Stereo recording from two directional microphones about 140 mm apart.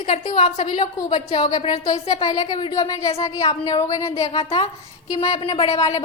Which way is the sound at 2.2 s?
30° left (ahead or behind).